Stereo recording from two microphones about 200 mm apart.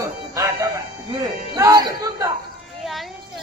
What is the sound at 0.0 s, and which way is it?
Music, 15° right (ahead or behind).